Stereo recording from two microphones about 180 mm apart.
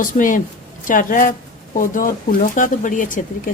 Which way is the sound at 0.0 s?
45° left (ahead or behind).